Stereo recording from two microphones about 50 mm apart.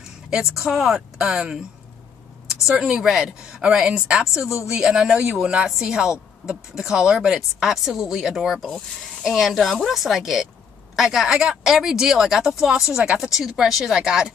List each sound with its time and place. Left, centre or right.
0.3 s speech: centre
1.1 s speech: centre
2.9 s speech: centre